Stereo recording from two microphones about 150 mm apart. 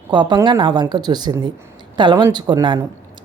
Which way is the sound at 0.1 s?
30° right (ahead or behind).